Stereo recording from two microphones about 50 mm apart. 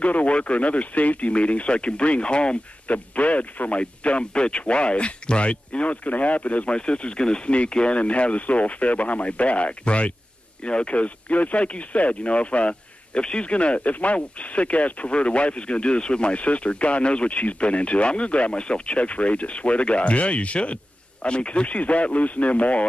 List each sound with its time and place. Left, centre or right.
0.0 s speech: left